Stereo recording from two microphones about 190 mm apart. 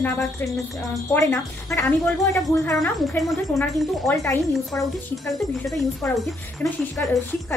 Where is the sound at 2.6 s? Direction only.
Centre (ahead or behind).